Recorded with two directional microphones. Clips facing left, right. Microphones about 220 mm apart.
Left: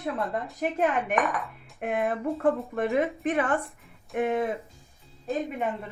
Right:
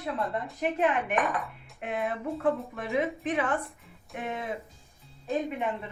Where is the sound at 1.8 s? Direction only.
50° left (ahead or behind).